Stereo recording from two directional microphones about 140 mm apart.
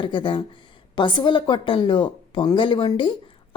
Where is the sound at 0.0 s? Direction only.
35° left (ahead or behind).